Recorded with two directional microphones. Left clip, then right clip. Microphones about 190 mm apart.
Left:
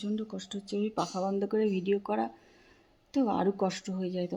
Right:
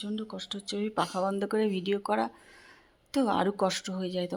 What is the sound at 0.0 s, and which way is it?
Speech, 15° left (ahead or behind).